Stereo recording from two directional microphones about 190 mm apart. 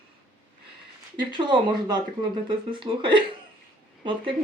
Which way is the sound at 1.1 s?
25° right (ahead or behind).